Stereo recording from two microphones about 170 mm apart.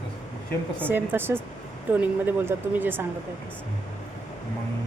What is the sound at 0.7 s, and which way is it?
Speech, 10° right (ahead or behind).